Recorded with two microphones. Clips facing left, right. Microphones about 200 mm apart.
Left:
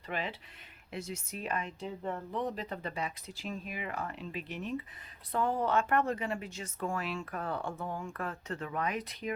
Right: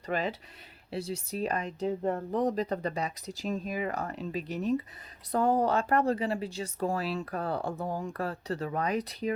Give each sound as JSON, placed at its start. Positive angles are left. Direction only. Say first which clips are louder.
{"t": 0.1, "sound": "speech", "louder": "right 6 dB", "side_deg": -40}